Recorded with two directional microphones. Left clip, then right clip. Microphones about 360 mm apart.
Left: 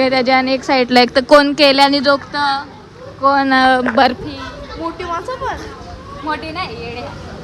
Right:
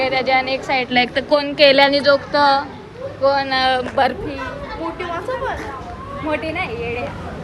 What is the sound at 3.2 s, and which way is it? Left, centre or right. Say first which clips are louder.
Speech: left 4 dB; left.